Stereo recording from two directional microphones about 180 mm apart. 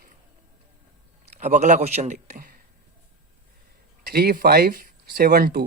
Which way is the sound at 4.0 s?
55° right (ahead or behind).